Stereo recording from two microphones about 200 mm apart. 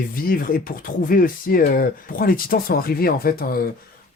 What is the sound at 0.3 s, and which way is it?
Speech, 45° left (ahead or behind).